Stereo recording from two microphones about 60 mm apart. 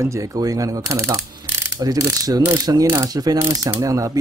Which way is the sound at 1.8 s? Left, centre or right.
Right.